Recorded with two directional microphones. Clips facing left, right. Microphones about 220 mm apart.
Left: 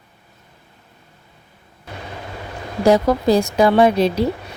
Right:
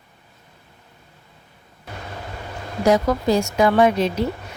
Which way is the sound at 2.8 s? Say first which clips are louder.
Left 3 dB; 30° left (ahead or behind).